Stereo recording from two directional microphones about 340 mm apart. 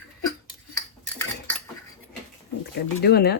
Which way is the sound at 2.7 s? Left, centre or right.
Left.